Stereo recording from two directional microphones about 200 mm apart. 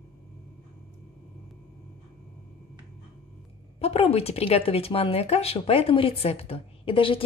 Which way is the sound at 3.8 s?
30° left (ahead or behind).